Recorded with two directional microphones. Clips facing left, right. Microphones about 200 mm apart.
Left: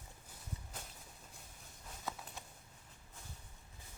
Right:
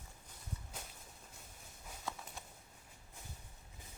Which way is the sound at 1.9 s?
Centre (ahead or behind).